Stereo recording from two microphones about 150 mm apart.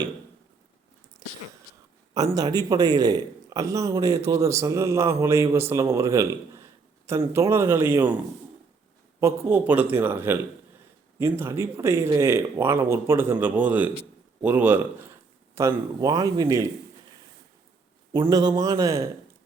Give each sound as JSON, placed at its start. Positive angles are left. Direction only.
{"t": 2.1, "sound": "a man's voice", "side_deg": -25}
{"t": 9.2, "sound": "a man's voice", "side_deg": -15}
{"t": 18.1, "sound": "a man's voice", "side_deg": -25}